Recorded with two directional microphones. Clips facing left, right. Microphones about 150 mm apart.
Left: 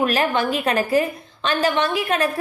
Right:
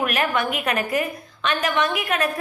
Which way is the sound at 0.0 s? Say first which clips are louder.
Left 3 dB; 30° left (ahead or behind).